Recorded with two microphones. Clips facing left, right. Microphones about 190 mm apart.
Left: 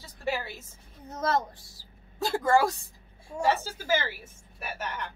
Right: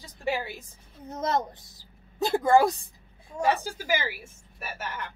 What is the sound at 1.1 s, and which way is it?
A woman's voice, 20° right (ahead or behind).